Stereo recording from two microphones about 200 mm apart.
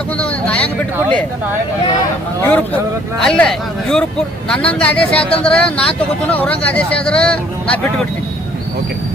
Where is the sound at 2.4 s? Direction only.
10° left (ahead or behind).